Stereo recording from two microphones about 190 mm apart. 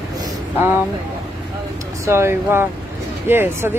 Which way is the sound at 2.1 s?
15° right (ahead or behind).